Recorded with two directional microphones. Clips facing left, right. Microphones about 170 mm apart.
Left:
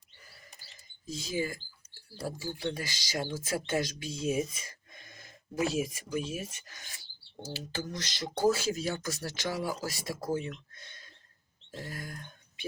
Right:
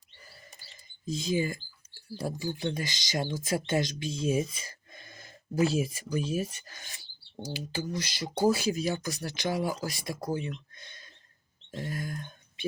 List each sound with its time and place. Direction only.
1.0 s speech: 20° right (ahead or behind)
7.4 s speech: 10° right (ahead or behind)